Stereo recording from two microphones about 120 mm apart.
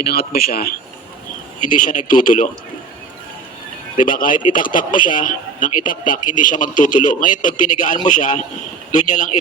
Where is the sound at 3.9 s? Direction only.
90° left.